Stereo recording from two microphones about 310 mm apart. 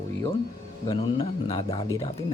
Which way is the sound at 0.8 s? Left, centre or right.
Centre.